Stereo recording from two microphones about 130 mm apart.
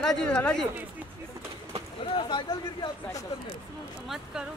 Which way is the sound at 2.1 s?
40° left (ahead or behind).